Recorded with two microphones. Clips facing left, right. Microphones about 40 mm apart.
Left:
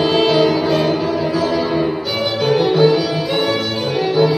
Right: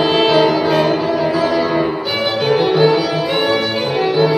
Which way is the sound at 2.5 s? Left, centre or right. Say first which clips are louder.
Even; centre.